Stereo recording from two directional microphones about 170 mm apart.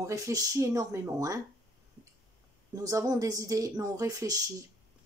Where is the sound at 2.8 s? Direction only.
20° right (ahead or behind).